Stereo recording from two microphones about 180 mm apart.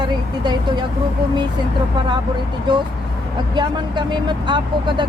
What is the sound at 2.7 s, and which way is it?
Speech, 25° right (ahead or behind).